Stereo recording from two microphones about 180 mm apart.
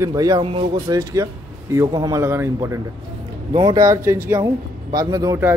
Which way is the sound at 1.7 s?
20° right (ahead or behind).